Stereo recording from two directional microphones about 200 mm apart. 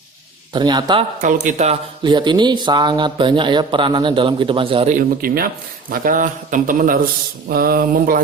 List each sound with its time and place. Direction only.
0.5 s speech: 20° right (ahead or behind)
1.5 s speech: 35° right (ahead or behind)
2.0 s speech: 20° right (ahead or behind)
4.9 s speech: 50° right (ahead or behind)